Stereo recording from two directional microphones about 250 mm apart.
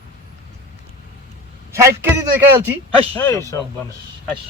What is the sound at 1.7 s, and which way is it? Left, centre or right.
Speech, centre.